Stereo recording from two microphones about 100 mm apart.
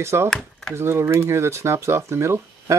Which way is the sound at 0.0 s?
25° right (ahead or behind).